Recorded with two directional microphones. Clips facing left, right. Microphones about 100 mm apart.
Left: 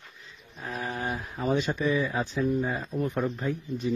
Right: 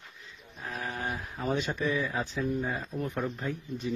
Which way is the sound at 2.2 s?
15° left (ahead or behind).